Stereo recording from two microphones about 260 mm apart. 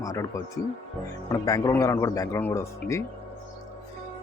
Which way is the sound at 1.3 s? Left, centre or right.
Centre.